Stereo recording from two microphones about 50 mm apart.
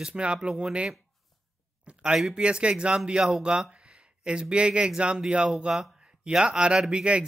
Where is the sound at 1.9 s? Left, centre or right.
Right.